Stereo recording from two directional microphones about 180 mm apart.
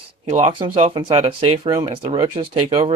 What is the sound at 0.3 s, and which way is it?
Speech, 40° right (ahead or behind).